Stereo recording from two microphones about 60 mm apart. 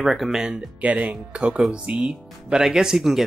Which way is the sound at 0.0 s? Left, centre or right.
Centre.